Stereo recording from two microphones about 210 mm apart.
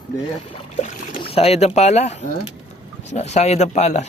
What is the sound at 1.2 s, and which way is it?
Speech, 30° left (ahead or behind).